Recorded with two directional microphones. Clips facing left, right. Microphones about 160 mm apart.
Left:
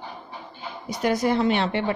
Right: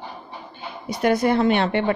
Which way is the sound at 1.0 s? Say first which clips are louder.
Right 3 dB; 60° right (ahead or behind).